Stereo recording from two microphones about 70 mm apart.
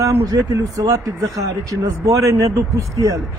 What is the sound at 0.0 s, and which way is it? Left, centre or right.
A man's voice, right.